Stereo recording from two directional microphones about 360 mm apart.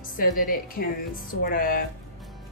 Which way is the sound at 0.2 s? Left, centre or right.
Left.